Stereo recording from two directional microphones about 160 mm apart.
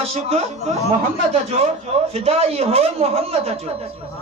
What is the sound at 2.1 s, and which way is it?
A man's voice, 40° right (ahead or behind).